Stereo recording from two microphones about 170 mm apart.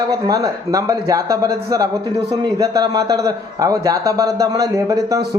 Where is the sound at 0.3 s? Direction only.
20° right (ahead or behind).